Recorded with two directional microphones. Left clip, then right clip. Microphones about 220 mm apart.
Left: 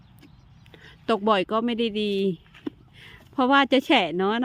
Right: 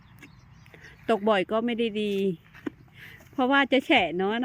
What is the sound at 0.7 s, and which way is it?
Speech, 10° left (ahead or behind).